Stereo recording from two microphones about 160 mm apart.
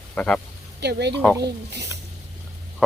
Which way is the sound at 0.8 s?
90° right.